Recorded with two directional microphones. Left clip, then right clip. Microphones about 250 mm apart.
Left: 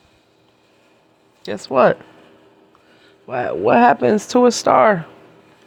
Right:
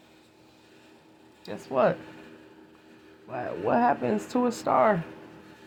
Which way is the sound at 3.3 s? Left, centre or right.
Left.